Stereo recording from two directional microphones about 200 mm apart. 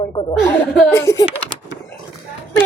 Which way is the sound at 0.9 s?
15° left (ahead or behind).